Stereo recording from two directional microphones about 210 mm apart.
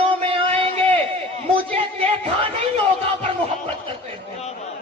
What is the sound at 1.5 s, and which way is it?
Music, 25° right (ahead or behind).